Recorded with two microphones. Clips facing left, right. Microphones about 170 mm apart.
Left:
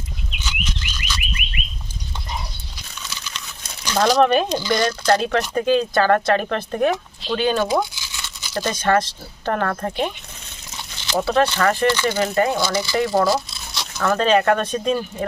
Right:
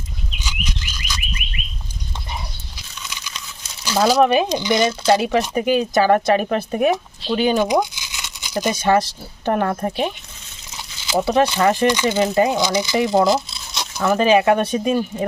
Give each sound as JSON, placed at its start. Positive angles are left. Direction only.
{"t": 0.3, "sound": "bird", "side_deg": -10}
{"t": 3.8, "sound": "speech", "side_deg": -10}
{"t": 11.0, "sound": "speech", "side_deg": -10}